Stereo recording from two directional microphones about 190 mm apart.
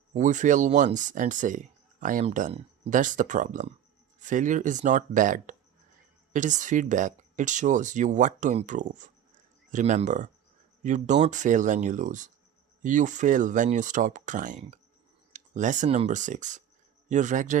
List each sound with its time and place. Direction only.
0.1 s speech: 40° right (ahead or behind)